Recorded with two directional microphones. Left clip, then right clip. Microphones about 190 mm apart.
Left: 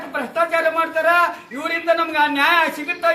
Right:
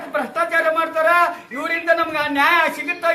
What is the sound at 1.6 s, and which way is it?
A man's voice, 15° right (ahead or behind).